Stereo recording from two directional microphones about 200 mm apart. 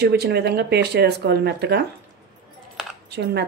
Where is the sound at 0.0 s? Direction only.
55° right (ahead or behind).